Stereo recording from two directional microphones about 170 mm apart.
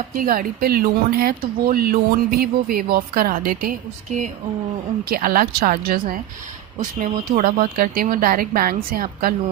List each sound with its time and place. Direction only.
0.1 s speech: 55° right (ahead or behind)